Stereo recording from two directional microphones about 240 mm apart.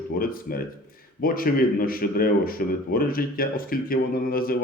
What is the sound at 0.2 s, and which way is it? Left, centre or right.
Speech, left.